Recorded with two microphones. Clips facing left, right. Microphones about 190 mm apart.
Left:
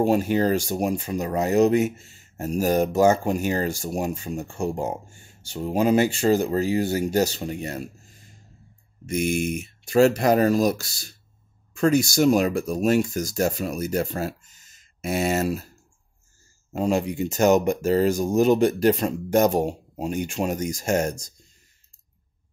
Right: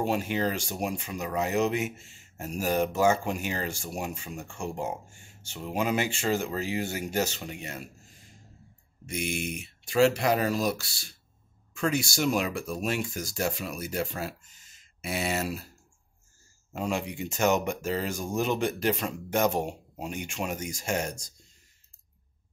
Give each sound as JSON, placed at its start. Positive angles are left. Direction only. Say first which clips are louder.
{"t": 0.0, "sound": "speech", "louder": "left 7 dB", "side_deg": 40}
{"t": 9.0, "sound": "speech", "louder": "left 9 dB", "side_deg": 45}
{"t": 16.7, "sound": "speech", "louder": "left 8 dB", "side_deg": 40}